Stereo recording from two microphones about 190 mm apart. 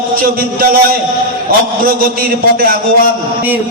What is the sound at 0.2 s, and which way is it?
Speech, 50° right (ahead or behind).